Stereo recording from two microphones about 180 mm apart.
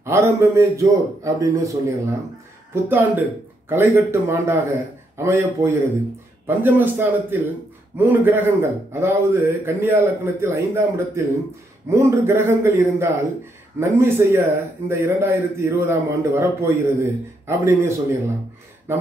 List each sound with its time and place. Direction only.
0.0 s a man's voice: 15° right (ahead or behind)